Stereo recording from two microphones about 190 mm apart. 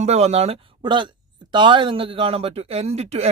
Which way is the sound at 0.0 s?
35° right (ahead or behind).